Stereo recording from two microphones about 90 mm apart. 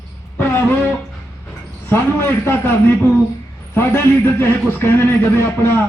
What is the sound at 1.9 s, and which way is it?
A man's voice, 25° left (ahead or behind).